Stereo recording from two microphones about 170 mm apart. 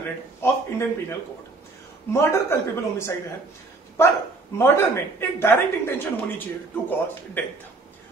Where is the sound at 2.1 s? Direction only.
15° left (ahead or behind).